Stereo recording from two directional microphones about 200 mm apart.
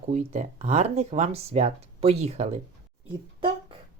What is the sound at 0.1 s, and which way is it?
Speech, 35° right (ahead or behind).